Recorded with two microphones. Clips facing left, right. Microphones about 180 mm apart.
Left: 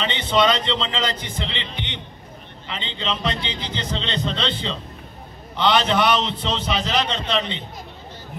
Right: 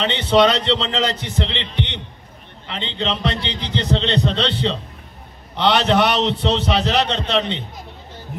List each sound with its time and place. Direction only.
0.0 s a man's voice: 75° right (ahead or behind)